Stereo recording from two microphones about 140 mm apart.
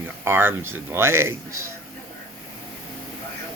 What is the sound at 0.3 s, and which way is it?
Speech, 15° right (ahead or behind).